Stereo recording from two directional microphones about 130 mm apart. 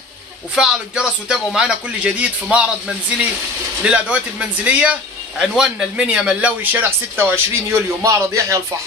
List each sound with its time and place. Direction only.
0.6 s speech: 5° right (ahead or behind)
3.8 s speech: 10° right (ahead or behind)